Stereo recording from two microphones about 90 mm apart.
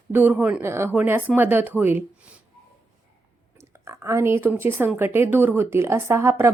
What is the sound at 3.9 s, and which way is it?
A woman's voice, 30° right (ahead or behind).